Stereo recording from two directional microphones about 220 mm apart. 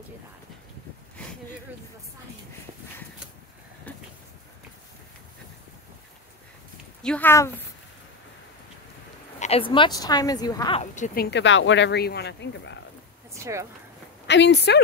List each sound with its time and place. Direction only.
3.9 s a sound: 5° left (ahead or behind)
7.0 s speech: 5° left (ahead or behind)
9.4 s a woman's voice: 25° left (ahead or behind)
10.8 s speech: 35° left (ahead or behind)
11.2 s speech: 55° left (ahead or behind)
13.3 s speech: 15° right (ahead or behind)
14.2 s a woman's voice: 50° left (ahead or behind)